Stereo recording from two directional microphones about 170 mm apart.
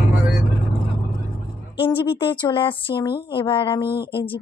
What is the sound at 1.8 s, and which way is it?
A woman's voice, 30° left (ahead or behind).